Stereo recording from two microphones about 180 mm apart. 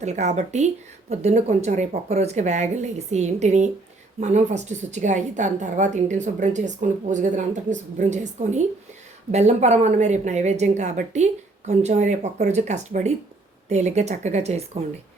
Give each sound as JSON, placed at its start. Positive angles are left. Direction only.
{"t": 0.0, "sound": "a woman's voice", "side_deg": -40}